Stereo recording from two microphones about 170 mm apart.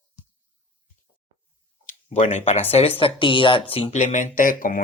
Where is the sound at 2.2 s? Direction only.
40° left (ahead or behind).